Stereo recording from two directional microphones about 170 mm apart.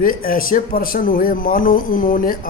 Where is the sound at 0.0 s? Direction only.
55° left (ahead or behind).